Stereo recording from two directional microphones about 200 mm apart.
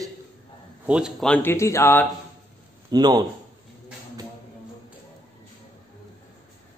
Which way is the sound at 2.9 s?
20° right (ahead or behind).